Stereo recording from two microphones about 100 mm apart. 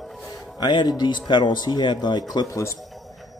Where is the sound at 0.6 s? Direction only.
45° left (ahead or behind).